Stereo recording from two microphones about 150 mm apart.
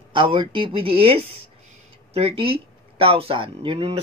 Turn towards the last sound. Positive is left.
turn(degrees=-40)  # may be behind; listen again after turning